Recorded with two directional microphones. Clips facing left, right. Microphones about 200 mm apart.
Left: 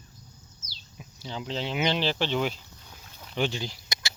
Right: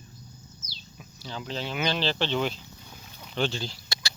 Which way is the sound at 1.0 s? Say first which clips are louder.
Left 2 dB; 20° left (ahead or behind).